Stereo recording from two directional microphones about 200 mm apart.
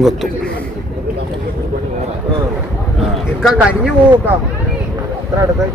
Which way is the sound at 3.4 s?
Centre (ahead or behind).